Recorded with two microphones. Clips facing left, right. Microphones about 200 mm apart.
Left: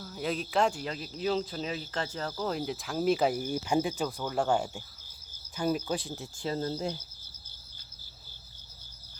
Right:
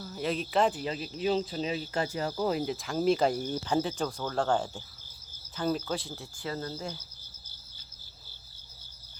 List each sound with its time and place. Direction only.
0.0 s speech: centre (ahead or behind)
1.5 s speech: 25° right (ahead or behind)
1.9 s speech: 10° right (ahead or behind); by 6.9 s 30° left (ahead or behind)